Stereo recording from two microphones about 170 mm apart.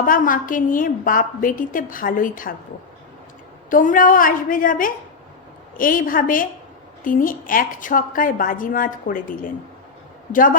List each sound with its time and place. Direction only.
0.0 s a woman's voice: 55° left (ahead or behind)
3.7 s a woman's voice: 50° left (ahead or behind)